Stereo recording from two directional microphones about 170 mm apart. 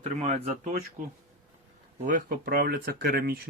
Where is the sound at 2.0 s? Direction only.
50° right (ahead or behind).